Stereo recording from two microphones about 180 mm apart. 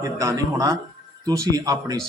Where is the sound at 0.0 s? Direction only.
20° right (ahead or behind).